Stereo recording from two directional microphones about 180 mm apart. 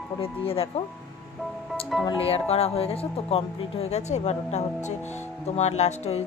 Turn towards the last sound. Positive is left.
turn(degrees=35)  # may be behind; listen again after turning